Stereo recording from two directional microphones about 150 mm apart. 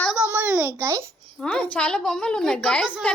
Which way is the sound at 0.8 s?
20° right (ahead or behind).